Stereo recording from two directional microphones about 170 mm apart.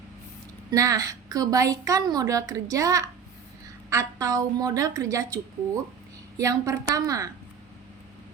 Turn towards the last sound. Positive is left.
turn(degrees=-20)  # may be behind; listen again after turning